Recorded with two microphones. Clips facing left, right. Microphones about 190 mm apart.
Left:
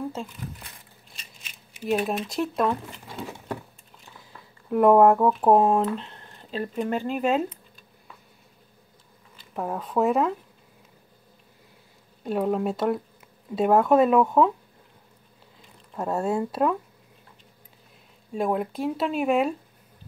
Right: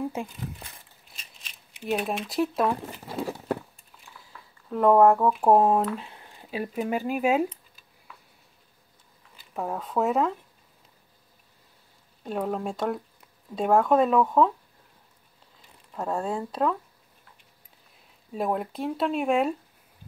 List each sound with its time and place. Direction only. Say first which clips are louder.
1.1 s speech: left 1 dB; centre (ahead or behind)
3.1 s a sound: right 5 dB; 35° right (ahead or behind)
4.6 s speech: left 2 dB; 10° left (ahead or behind); by 7.4 s 10° right (ahead or behind)
9.4 s speech: left 1 dB; centre (ahead or behind)
12.3 s speech: left 4 dB; 5° left (ahead or behind)
16.0 s speech: left 3 dB; 5° left (ahead or behind)
18.3 s speech: left 2 dB; centre (ahead or behind)